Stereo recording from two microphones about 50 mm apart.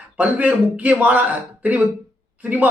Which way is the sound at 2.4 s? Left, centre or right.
Right.